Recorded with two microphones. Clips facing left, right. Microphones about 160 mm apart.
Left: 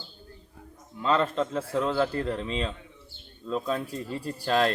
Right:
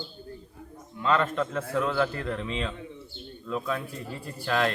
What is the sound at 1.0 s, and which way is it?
Speech, 35° left (ahead or behind).